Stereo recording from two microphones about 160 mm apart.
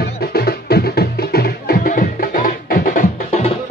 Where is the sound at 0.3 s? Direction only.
80° left; by 3.1 s 55° left (ahead or behind).